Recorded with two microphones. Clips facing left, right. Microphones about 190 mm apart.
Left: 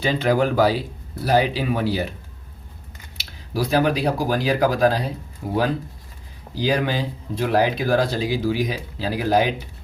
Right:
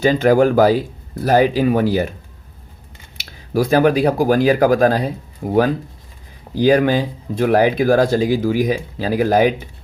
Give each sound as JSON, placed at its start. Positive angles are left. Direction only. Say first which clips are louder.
{"t": 0.0, "sound": "speech", "louder": "right 7 dB", "side_deg": -45}
{"t": 3.2, "sound": "speech", "louder": "right 7 dB", "side_deg": -50}